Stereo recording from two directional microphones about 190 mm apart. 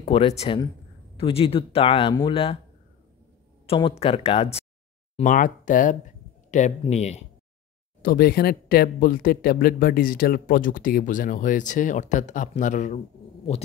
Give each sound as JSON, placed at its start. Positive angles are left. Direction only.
{"t": 0.0, "sound": "speech", "side_deg": 30}
{"t": 3.6, "sound": "speech", "side_deg": 25}
{"t": 5.1, "sound": "speech", "side_deg": 40}
{"t": 8.0, "sound": "speech", "side_deg": 50}